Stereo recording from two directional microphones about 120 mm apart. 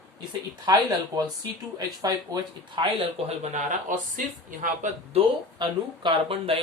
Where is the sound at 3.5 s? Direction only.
90° right.